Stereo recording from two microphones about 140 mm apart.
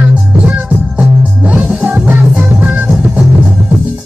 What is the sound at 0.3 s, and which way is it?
Music, 10° right (ahead or behind).